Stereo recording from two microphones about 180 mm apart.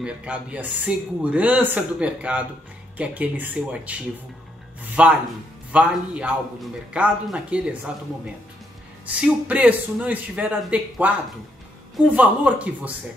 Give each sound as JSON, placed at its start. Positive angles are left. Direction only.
{"t": 0.0, "sound": "speech", "side_deg": -5}
{"t": 9.0, "sound": "speech", "side_deg": -10}